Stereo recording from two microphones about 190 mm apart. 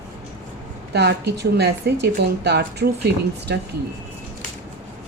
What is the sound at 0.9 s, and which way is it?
Speech, 60° right (ahead or behind).